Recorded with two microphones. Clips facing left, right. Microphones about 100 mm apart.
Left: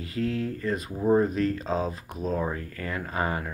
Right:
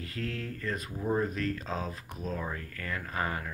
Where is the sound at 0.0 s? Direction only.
10° left (ahead or behind).